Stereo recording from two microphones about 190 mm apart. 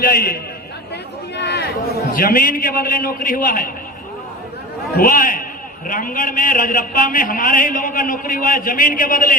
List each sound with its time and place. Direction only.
0.0 s a man's voice: 55° left (ahead or behind)
1.4 s a sound: 60° left (ahead or behind)
2.1 s a man's voice: 50° left (ahead or behind)
4.9 s a man's voice: 45° left (ahead or behind)